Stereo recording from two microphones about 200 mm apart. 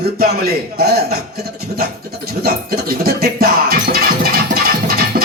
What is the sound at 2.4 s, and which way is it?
Music, 45° right (ahead or behind).